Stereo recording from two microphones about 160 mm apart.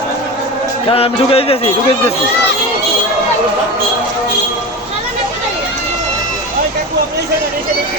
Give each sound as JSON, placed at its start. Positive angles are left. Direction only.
{"t": 0.9, "sound": "speech", "side_deg": 35}